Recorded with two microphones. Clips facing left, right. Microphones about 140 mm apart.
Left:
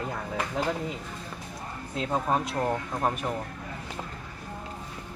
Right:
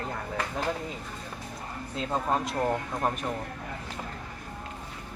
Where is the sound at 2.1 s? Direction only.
5° left (ahead or behind).